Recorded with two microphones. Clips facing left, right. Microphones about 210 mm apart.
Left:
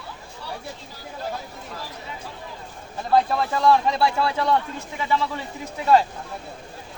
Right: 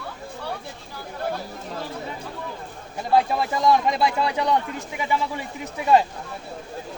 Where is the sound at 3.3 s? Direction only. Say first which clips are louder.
Left 1 dB; 15° right (ahead or behind).